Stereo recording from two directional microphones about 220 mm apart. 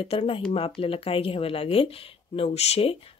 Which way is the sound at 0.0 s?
25° left (ahead or behind).